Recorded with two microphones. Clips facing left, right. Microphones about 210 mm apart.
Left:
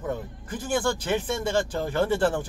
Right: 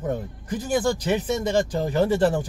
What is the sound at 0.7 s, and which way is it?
Speech, 15° right (ahead or behind).